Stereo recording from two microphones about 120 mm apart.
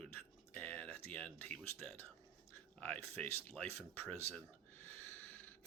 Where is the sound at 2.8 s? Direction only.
15° left (ahead or behind).